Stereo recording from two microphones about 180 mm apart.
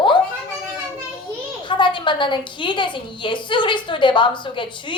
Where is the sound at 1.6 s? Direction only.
25° left (ahead or behind).